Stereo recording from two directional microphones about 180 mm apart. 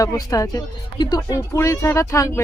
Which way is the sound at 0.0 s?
20° left (ahead or behind).